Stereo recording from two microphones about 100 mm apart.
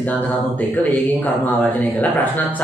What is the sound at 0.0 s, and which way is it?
Speech, 15° left (ahead or behind).